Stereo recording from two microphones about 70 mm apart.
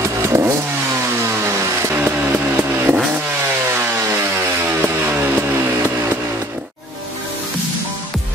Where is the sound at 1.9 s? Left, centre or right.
Right.